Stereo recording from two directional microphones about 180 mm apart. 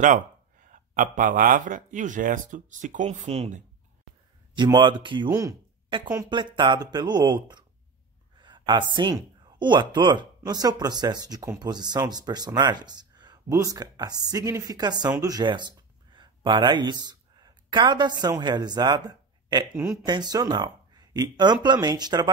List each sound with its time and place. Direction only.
0.0 s speech: 45° right (ahead or behind)
4.6 s speech: 25° right (ahead or behind)
8.4 s a sound: 25° right (ahead or behind)
8.9 s a woman's voice: 25° right (ahead or behind)
19.7 s speech: 10° right (ahead or behind)
20.1 s speech: 25° right (ahead or behind)